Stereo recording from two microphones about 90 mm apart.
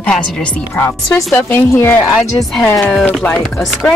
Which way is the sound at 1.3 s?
25° left (ahead or behind).